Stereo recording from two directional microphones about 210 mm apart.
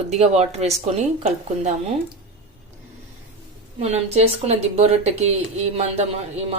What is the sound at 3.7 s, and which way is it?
A woman's voice, 30° right (ahead or behind).